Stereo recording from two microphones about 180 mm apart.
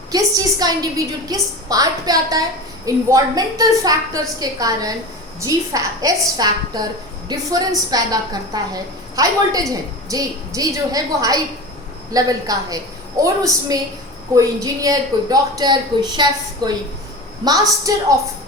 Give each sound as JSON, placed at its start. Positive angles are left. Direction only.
{"t": 0.1, "sound": "a woman's voice", "side_deg": -20}
{"t": 14.3, "sound": "a woman's voice", "side_deg": -20}